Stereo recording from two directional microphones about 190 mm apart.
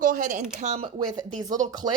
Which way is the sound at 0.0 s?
45° right (ahead or behind).